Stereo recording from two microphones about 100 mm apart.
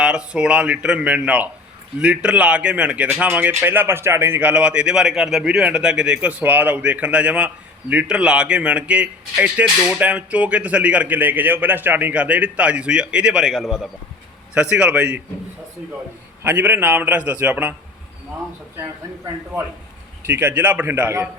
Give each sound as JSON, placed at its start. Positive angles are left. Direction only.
{"t": 0.0, "sound": "speech", "side_deg": -10}
{"t": 16.4, "sound": "speech", "side_deg": -20}
{"t": 20.2, "sound": "a man's voice", "side_deg": -20}